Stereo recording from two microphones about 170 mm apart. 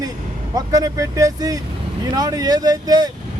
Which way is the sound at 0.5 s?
20° right (ahead or behind).